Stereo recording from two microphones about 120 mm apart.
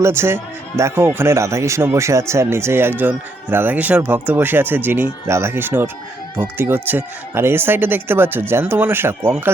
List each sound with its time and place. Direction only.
0.0 s speech: 20° right (ahead or behind)